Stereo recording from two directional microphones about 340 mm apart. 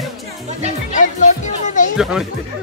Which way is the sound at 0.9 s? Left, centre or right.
Left.